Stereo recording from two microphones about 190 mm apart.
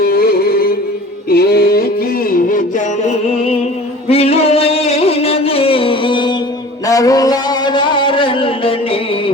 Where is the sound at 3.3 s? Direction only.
30° left (ahead or behind).